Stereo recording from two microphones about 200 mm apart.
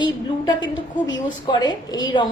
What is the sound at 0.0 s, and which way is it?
A woman's voice, 20° left (ahead or behind).